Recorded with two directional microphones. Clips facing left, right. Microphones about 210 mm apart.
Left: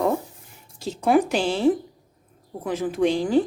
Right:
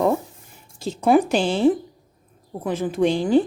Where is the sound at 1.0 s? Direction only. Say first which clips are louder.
Right 2 dB; 25° right (ahead or behind).